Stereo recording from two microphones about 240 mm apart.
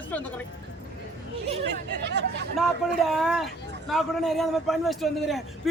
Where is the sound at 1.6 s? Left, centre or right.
Right.